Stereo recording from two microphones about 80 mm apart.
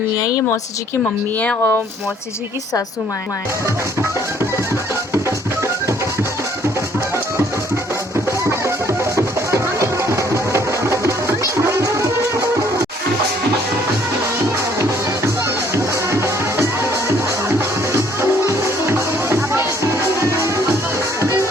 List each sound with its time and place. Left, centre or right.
0.3 s speech: left
1.4 s speech: left
9.1 s music: right
14.8 s music: right
17.9 s music: right
21.2 s music: right